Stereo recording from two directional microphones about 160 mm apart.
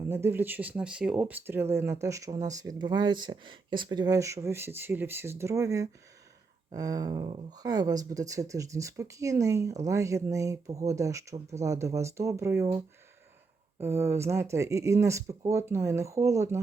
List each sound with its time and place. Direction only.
0.1 s speech: 15° right (ahead or behind)
13.8 s speech: 15° right (ahead or behind)